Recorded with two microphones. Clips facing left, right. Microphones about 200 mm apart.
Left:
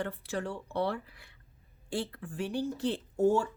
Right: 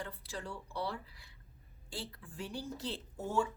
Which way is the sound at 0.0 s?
65° left (ahead or behind).